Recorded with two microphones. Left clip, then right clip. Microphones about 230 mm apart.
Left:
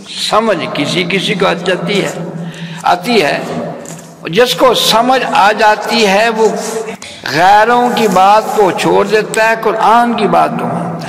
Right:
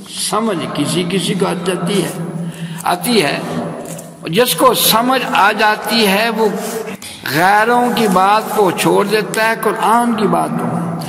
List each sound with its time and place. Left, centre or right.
0.2 s a man's voice: right